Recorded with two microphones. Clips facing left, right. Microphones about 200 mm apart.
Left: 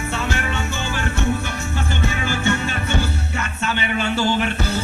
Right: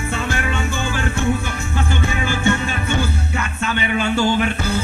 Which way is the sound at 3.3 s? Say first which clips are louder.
Right 2 dB; 50° right (ahead or behind).